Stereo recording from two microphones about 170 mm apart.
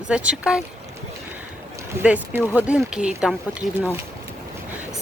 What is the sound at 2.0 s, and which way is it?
Speech, 10° right (ahead or behind).